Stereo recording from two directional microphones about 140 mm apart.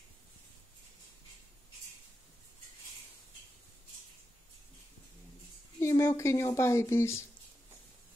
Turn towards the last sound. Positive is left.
turn(degrees=20)  # may be behind; listen again after turning